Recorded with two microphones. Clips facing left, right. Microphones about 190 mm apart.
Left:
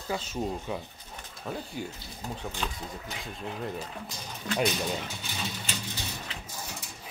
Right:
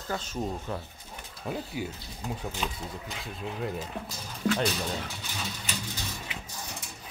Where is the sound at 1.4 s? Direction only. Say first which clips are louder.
Right 2 dB; 5° right (ahead or behind).